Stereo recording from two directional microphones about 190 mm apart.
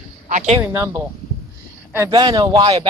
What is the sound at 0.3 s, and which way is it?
Speech, 40° right (ahead or behind).